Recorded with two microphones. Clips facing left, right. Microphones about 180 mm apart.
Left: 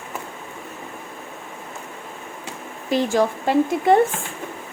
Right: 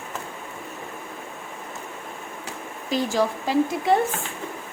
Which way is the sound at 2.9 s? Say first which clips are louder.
Left 4 dB; 55° left (ahead or behind).